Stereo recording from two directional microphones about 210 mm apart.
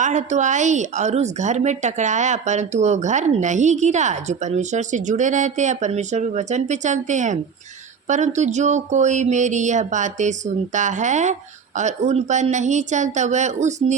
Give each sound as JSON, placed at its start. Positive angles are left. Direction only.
{"t": 0.0, "sound": "speech", "side_deg": -35}